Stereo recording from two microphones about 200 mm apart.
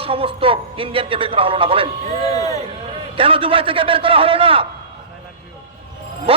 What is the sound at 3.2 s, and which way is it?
A man's voice, 25° right (ahead or behind).